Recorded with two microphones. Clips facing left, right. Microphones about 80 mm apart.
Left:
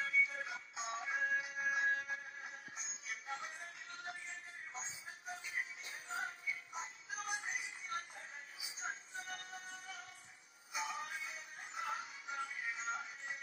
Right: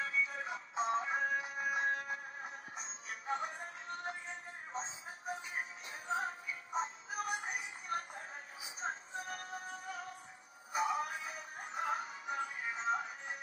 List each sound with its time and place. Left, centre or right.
0.0 s music: right
5.4 s music: right